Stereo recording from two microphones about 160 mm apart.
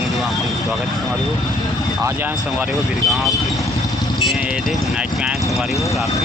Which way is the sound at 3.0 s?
Centre (ahead or behind).